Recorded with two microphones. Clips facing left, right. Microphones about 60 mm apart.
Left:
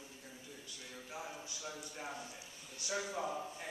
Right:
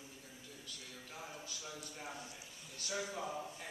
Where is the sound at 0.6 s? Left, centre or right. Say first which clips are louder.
Left 1 dB; centre.